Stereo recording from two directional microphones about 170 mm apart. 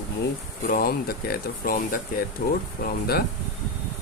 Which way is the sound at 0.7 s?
60° left (ahead or behind).